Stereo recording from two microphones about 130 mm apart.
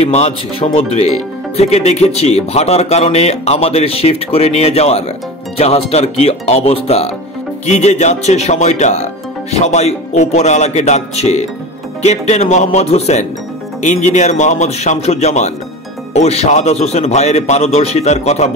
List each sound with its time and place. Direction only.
0.0 s speech: 55° left (ahead or behind)
7.6 s speech: 60° left (ahead or behind)